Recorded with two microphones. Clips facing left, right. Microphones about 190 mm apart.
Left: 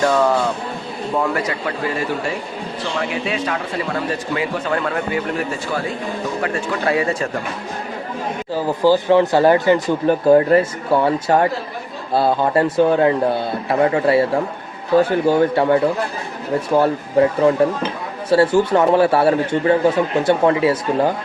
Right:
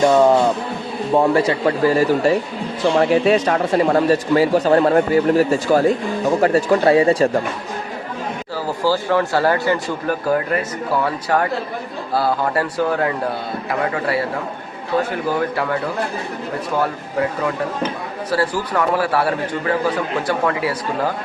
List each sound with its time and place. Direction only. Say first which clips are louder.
0.0 s speech: right 3 dB; 20° right (ahead or behind)
8.5 s speech: left 4 dB; 20° left (ahead or behind)
16.8 s speech: left 6 dB; 25° left (ahead or behind)